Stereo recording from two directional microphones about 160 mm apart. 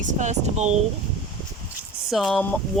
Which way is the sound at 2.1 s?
Centre (ahead or behind).